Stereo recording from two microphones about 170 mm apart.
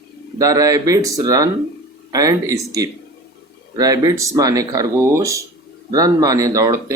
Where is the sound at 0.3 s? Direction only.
20° right (ahead or behind).